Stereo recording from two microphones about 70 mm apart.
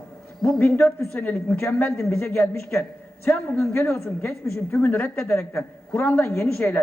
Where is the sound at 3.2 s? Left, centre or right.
Left.